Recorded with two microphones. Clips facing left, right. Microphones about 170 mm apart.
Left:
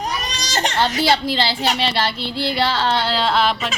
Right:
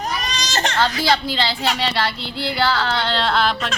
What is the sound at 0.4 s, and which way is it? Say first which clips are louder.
Baby cry: left 1 dB; 15° left (ahead or behind).